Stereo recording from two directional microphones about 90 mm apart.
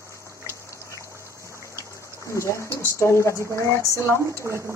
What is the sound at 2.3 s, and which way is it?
Speech, 35° left (ahead or behind).